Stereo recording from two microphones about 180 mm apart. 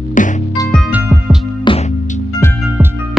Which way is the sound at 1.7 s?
25° left (ahead or behind).